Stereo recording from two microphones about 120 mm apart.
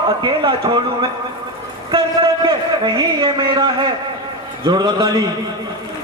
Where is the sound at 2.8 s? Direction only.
35° right (ahead or behind).